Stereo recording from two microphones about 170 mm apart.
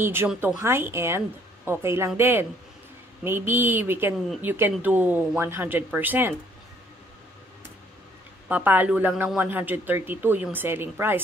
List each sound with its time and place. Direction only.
0.0 s speech: 15° right (ahead or behind)
8.5 s speech: 10° right (ahead or behind)